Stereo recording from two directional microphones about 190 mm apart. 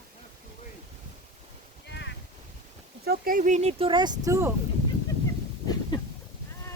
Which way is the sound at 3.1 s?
45° right (ahead or behind).